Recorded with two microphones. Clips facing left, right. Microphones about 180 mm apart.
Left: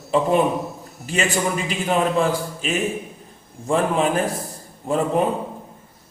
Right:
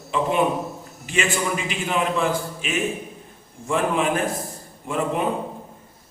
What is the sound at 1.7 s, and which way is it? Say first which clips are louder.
A man's voice: left 3 dB; 40° left (ahead or behind).